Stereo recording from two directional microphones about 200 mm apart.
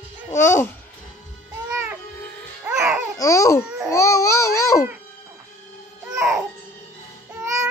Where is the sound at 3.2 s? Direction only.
15° left (ahead or behind).